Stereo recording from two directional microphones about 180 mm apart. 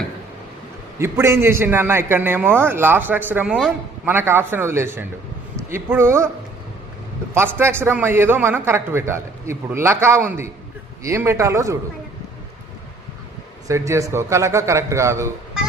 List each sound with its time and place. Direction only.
0.9 s a man's voice: 15° right (ahead or behind)
7.3 s a man's voice: 15° right (ahead or behind)
13.7 s a man's voice: 15° right (ahead or behind)